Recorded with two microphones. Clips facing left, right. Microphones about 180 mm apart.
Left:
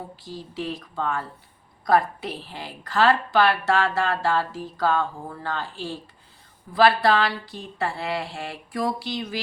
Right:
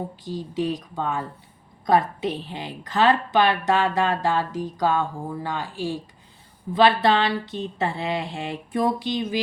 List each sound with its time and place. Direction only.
0.3 s a woman's voice: 20° right (ahead or behind)